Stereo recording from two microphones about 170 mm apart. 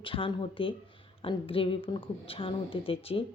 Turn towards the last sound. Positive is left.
turn(degrees=35)  # may be behind; listen again after turning